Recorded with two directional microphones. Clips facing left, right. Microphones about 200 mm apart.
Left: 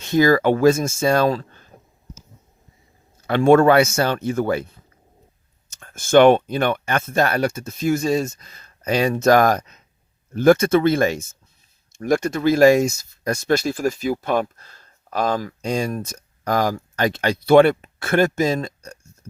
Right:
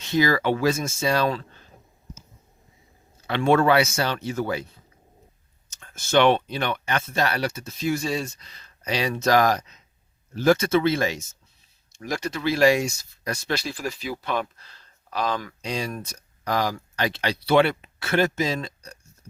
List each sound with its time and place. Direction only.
0.0 s speech: 50° left (ahead or behind)
3.2 s speech: 45° left (ahead or behind)
5.7 s speech: 50° left (ahead or behind)
19.2 s a sound: 50° left (ahead or behind)